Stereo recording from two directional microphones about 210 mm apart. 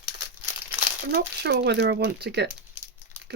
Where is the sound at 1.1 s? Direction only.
50° right (ahead or behind).